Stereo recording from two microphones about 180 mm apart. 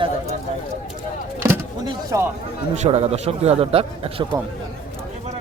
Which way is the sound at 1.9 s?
15° right (ahead or behind).